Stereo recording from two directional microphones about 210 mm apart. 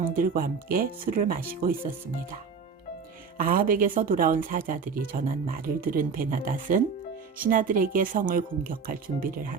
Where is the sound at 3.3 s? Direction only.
45° right (ahead or behind).